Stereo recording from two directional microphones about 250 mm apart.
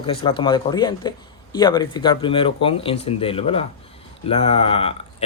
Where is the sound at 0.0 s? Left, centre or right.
Left.